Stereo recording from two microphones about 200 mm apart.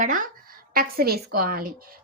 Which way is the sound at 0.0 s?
45° right (ahead or behind).